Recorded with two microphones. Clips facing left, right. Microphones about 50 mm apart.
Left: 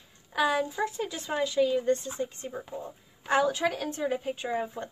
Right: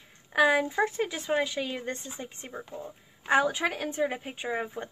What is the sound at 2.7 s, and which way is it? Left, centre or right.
Speech, centre.